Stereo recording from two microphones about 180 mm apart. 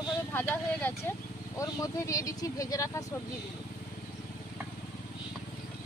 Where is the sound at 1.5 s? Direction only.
20° left (ahead or behind).